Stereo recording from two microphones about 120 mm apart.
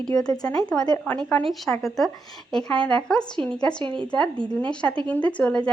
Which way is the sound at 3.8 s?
40° right (ahead or behind).